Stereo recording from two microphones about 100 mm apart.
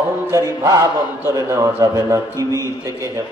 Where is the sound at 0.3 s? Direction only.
35° right (ahead or behind).